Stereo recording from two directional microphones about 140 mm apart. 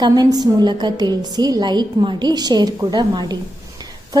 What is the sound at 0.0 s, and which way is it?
A woman's voice, 30° right (ahead or behind).